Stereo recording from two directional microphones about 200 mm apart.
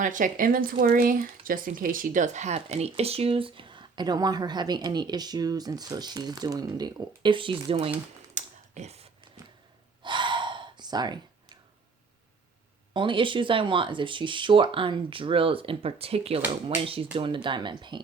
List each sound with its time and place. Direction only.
0.0 s speech: 40° right (ahead or behind)
8.4 s a sound: 35° right (ahead or behind)
10.0 s gasp: 25° right (ahead or behind)
12.9 s speech: 25° right (ahead or behind)